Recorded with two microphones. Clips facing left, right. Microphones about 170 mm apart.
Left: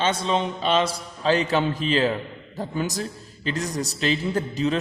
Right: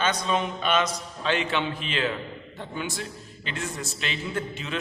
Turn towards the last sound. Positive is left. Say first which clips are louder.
# left 8 dB
turn(degrees=40)  # may be behind; listen again after turning